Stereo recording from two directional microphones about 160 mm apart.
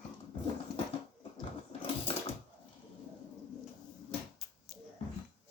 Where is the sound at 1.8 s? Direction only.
35° left (ahead or behind).